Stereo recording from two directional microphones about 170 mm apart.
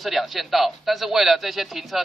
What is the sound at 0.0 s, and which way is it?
Speech, centre (ahead or behind).